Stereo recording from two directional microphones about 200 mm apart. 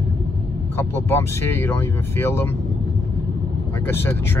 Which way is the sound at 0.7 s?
10° left (ahead or behind).